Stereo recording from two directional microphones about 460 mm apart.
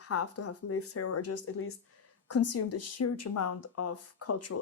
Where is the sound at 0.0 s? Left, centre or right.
Left.